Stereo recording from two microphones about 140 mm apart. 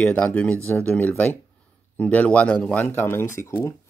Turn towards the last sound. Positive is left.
turn(degrees=20)  # may be behind; listen again after turning